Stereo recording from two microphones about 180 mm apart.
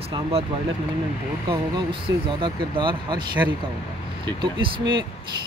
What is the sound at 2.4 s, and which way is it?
Speech, 25° right (ahead or behind).